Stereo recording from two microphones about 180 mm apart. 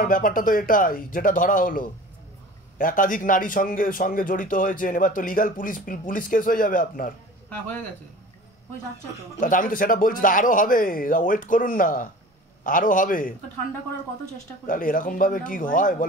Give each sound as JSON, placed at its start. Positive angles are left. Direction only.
{"t": 0.0, "sound": "a man's voice", "side_deg": 50}
{"t": 7.4, "sound": "a man's voice", "side_deg": 10}
{"t": 9.4, "sound": "a man's voice", "side_deg": 50}
{"t": 14.7, "sound": "a man's voice", "side_deg": 50}